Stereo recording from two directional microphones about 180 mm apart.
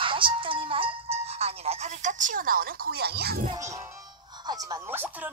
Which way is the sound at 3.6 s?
15° right (ahead or behind).